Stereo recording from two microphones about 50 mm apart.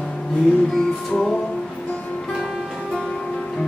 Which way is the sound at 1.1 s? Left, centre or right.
Centre.